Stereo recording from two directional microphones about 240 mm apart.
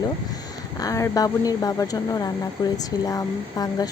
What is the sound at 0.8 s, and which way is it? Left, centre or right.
Speech, centre.